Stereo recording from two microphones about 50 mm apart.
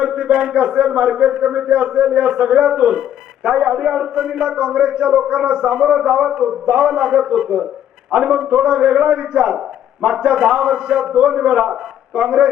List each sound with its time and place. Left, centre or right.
0.0 s a sound: centre
0.3 s a man's voice: centre
0.5 s a man's voice: centre
4.1 s speech: centre
4.5 s a man's voice: centre
6.7 s a man's voice: centre
7.5 s a man's voice: right
8.1 s a man's voice: centre
8.4 s a man's voice: centre
10.3 s a man's voice: centre